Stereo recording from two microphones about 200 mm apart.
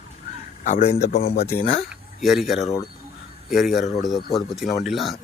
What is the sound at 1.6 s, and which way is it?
Speech, 35° left (ahead or behind).